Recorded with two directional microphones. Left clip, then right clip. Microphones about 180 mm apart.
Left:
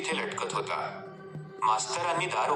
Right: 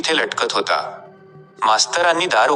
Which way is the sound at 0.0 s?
50° right (ahead or behind).